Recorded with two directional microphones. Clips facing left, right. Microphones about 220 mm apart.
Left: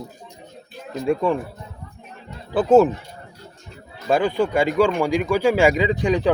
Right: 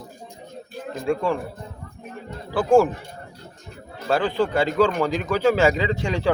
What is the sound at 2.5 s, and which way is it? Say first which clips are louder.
Speech: left 3 dB; 20° left (ahead or behind).